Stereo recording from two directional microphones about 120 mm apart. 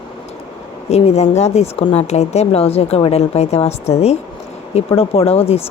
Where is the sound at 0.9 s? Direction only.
60° left (ahead or behind).